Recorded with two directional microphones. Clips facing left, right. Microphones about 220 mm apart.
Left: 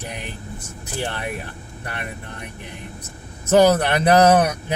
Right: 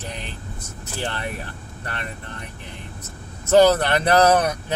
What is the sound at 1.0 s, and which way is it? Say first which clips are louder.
Speech: left 1 dB; 15° left (ahead or behind).